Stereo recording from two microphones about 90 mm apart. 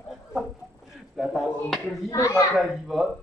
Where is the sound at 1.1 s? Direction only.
Centre (ahead or behind).